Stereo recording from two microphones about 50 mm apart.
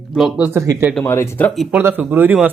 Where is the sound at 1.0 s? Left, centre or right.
Left.